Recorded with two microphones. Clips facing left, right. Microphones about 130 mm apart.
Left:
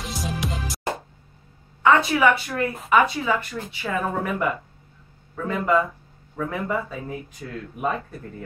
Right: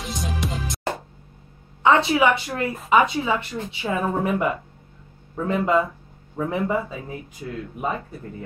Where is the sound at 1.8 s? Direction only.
25° right (ahead or behind).